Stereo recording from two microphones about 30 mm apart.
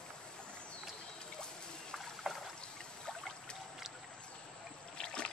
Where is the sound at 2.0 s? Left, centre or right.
Centre.